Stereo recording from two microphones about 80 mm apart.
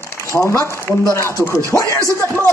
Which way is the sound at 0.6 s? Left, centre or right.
Left.